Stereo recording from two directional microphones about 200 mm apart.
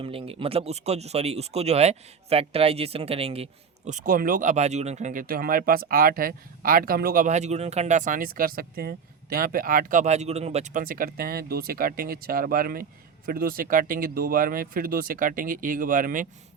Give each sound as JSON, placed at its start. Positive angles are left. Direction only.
{"t": 0.0, "sound": "speech", "side_deg": -30}